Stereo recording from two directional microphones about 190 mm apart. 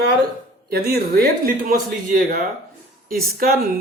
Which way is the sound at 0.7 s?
55° right (ahead or behind).